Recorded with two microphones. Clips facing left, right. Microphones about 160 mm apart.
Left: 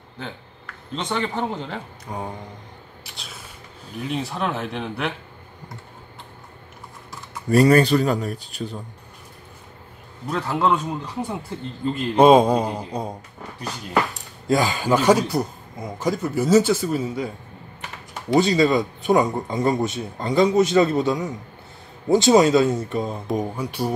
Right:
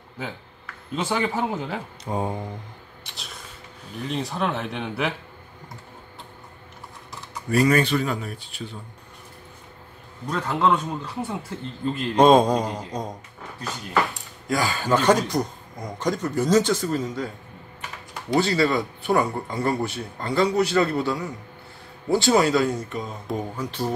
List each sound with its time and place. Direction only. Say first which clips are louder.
0.9 s speech: right 1 dB; 5° right (ahead or behind)
2.0 s music: right 5 dB; 20° right (ahead or behind)
3.0 s a sound: even; centre (ahead or behind)
4.0 s speech: left 1 dB; 5° left (ahead or behind)
7.4 s speech: left 5 dB; 35° left (ahead or behind)
10.3 s speech: left 1 dB; 5° left (ahead or behind)
11.8 s a man's voice: left 2 dB; 10° left (ahead or behind)
14.5 s a man's voice: left 3 dB; 20° left (ahead or behind)
18.3 s speech: left 4 dB; 20° left (ahead or behind)
23.3 s a man's voice: left 2 dB; 10° left (ahead or behind)